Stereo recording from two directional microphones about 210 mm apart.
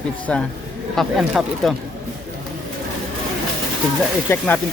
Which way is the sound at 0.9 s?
Centre (ahead or behind).